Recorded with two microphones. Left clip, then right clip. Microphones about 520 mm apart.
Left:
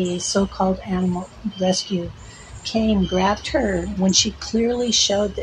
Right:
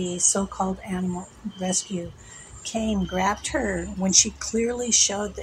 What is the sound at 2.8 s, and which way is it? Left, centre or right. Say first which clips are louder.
Speech: left 4 dB; right.